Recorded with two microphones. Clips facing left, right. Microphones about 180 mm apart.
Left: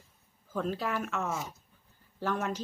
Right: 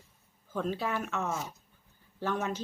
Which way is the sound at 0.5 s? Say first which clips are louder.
Even; centre (ahead or behind).